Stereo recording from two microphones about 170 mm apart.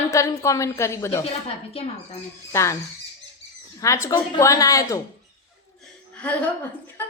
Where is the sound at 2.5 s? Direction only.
15° left (ahead or behind).